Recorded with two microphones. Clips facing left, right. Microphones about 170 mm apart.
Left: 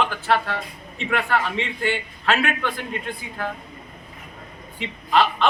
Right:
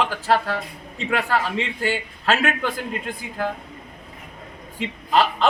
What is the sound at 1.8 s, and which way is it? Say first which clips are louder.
Speech: even; 40° right (ahead or behind).